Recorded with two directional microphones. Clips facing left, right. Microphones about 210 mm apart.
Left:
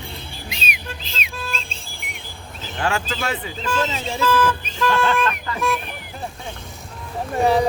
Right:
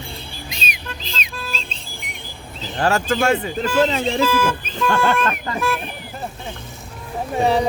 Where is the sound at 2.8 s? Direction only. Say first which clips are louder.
Right 6 dB; 45° right (ahead or behind).